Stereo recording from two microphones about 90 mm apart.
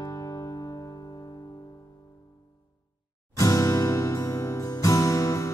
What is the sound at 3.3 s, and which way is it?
Music, 40° left (ahead or behind).